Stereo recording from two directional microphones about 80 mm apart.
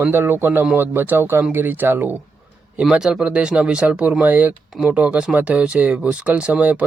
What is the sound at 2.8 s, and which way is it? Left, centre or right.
Speech, centre.